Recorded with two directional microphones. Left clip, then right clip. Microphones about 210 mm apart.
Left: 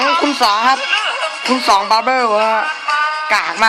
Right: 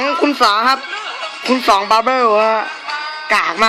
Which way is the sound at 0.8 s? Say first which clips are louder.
Left 8 dB; 55° left (ahead or behind).